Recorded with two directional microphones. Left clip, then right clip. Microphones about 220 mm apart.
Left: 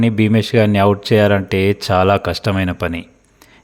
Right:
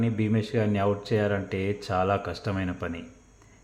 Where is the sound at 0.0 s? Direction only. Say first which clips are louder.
Left 12 dB; 45° left (ahead or behind).